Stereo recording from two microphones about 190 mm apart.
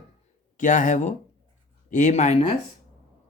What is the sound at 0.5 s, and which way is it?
Speech, 40° left (ahead or behind).